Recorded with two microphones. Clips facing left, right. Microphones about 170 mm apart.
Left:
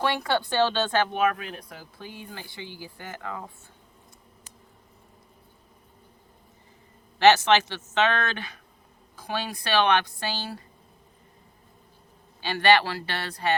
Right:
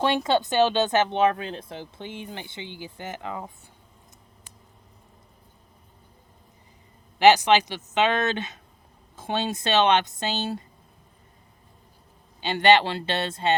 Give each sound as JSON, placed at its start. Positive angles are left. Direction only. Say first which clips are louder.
{"t": 0.0, "sound": "speech", "louder": "right 3 dB", "side_deg": -20}
{"t": 7.2, "sound": "speech", "louder": "right 1 dB", "side_deg": -15}
{"t": 12.4, "sound": "speech", "louder": "right 2 dB", "side_deg": -20}